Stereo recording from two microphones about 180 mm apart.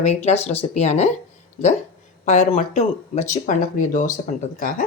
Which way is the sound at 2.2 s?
40° left (ahead or behind).